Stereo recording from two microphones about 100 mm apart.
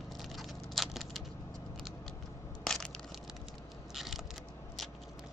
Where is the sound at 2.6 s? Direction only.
5° left (ahead or behind).